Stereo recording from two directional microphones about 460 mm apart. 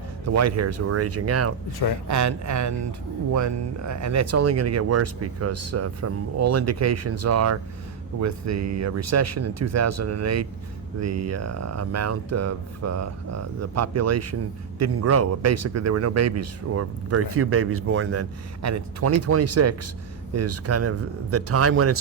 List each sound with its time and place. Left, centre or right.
0.3 s a man's voice: right